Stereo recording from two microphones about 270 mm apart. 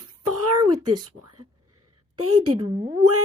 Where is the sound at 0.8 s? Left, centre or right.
Centre.